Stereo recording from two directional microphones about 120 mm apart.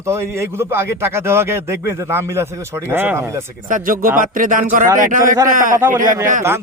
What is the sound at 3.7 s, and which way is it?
Speech, 90° right.